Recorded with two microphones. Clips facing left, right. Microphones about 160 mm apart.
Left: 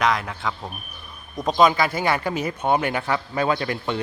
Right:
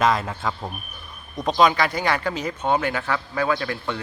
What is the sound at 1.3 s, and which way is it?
Speech, centre (ahead or behind).